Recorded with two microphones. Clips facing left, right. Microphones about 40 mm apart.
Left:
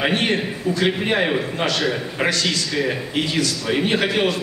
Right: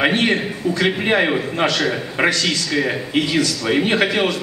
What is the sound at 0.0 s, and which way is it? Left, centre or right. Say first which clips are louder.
A man's voice: right 3 dB; right.